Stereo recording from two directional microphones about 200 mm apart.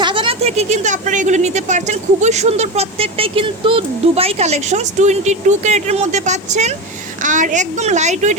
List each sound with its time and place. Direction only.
0.0 s speech: 25° right (ahead or behind)